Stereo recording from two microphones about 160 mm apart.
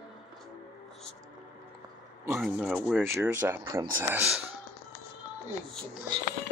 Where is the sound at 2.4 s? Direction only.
Centre (ahead or behind).